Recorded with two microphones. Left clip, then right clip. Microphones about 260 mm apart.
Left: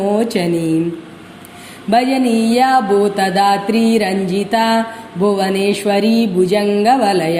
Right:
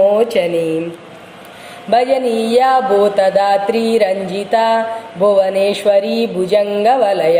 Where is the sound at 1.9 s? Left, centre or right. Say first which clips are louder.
Right 1 dB; left.